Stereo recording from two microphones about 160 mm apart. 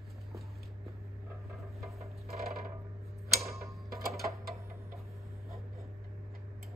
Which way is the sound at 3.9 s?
Centre (ahead or behind).